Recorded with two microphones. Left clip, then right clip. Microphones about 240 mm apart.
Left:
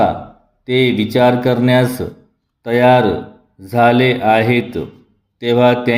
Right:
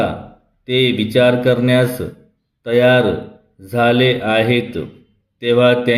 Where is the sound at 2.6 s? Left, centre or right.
Centre.